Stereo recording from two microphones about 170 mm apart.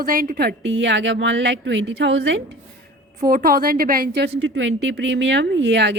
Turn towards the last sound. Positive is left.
turn(degrees=-90)